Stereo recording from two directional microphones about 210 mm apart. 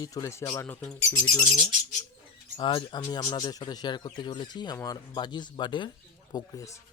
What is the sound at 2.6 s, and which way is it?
Speech, 25° left (ahead or behind).